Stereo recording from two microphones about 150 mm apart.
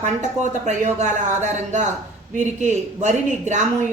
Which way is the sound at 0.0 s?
50° right (ahead or behind).